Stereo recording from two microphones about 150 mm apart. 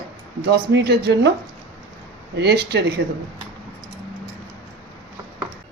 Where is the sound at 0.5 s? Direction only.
90° right.